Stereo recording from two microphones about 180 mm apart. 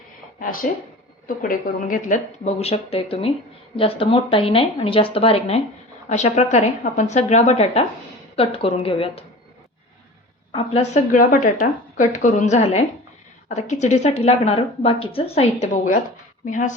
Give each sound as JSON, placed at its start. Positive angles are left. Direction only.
{"t": 0.3, "sound": "speech", "side_deg": 50}
{"t": 10.5, "sound": "a woman's voice", "side_deg": 30}
{"t": 15.6, "sound": "a woman's voice", "side_deg": 45}